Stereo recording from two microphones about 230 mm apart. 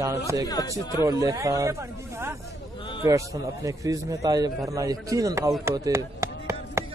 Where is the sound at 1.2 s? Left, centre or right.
Centre.